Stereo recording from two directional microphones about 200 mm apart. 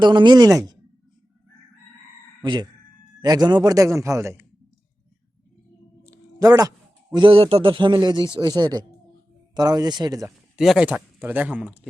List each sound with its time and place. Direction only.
0.0 s speech: 25° right (ahead or behind)
2.4 s speech: 20° right (ahead or behind)
6.1 s a man's voice: 15° right (ahead or behind)
10.6 s speech: 5° right (ahead or behind)